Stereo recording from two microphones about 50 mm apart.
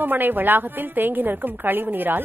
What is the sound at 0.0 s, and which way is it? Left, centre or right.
A woman's voice, right.